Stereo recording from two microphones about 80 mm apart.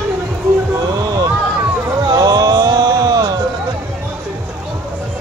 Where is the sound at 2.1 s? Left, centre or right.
Right.